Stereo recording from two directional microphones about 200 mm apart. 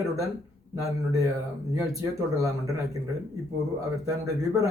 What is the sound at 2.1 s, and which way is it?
Speech, 15° right (ahead or behind).